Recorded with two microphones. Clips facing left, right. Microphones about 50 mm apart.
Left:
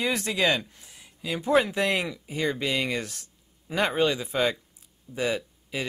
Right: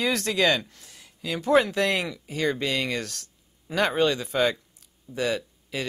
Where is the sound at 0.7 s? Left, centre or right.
Centre.